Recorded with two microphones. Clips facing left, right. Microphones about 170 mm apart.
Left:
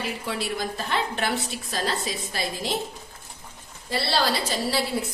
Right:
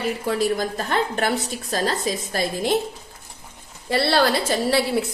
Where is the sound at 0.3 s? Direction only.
45° right (ahead or behind).